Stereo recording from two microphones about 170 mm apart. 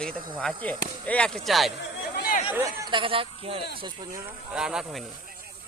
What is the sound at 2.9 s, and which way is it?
Speech, 30° right (ahead or behind).